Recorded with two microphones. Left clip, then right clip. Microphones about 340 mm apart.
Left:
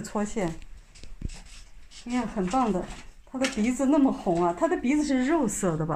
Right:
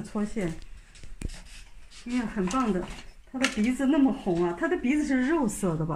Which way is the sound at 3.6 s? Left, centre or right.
Centre.